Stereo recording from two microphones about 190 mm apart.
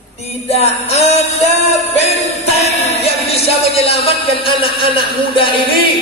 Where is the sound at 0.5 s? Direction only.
35° left (ahead or behind).